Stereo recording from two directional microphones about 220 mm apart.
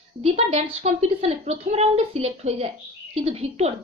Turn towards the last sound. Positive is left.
turn(degrees=-30)  # may be behind; listen again after turning